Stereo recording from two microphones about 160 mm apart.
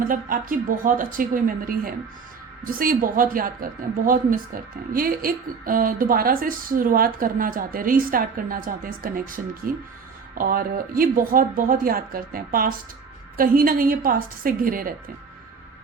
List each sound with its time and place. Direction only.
0.1 s a woman's voice: 60° right (ahead or behind)